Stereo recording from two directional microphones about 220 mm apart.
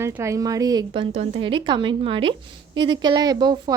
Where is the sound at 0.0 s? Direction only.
10° right (ahead or behind).